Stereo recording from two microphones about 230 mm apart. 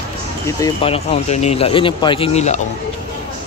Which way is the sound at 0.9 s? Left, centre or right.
Left.